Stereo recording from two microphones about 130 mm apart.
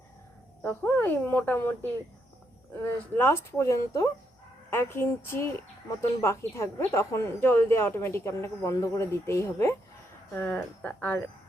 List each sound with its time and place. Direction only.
0.6 s speech: 15° left (ahead or behind)
3.2 s speech: 20° left (ahead or behind)